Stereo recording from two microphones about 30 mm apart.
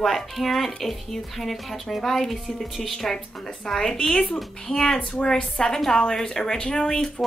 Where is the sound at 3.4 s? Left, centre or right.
Left.